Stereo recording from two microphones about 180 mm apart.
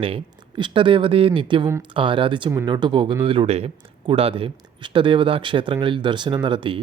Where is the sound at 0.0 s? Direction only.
30° right (ahead or behind).